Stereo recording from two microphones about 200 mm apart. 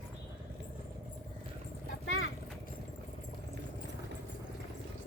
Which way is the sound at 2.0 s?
75° left (ahead or behind).